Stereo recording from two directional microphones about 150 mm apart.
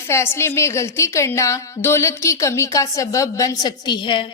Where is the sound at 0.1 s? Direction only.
15° left (ahead or behind).